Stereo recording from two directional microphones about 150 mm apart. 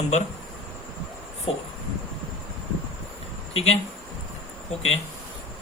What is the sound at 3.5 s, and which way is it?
Speech, 40° left (ahead or behind).